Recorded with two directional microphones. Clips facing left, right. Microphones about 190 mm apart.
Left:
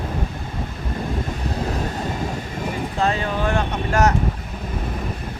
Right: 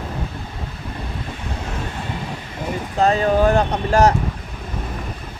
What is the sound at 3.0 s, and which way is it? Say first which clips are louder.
Speech: right 7 dB; 40° right (ahead or behind).